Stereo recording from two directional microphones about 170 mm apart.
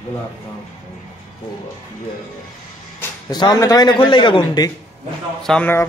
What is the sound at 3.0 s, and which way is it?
A man's voice, 25° left (ahead or behind).